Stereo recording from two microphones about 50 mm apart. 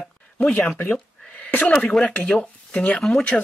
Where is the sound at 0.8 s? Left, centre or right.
Left.